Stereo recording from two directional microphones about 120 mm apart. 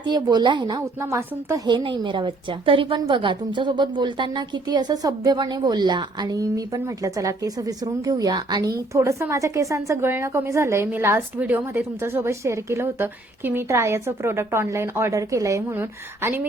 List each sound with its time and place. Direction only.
0.0 s a woman's voice: 35° right (ahead or behind); by 16.5 s 15° right (ahead or behind)